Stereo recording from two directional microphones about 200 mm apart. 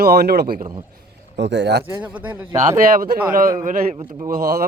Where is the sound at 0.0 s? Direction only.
50° right (ahead or behind).